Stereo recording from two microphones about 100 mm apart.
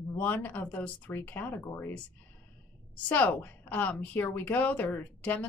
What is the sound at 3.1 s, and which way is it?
A woman's voice, 15° left (ahead or behind).